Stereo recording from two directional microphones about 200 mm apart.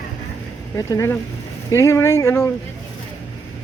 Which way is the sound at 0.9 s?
15° left (ahead or behind).